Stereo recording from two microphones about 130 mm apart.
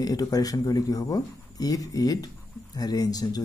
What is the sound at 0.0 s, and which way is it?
Speech, 30° left (ahead or behind).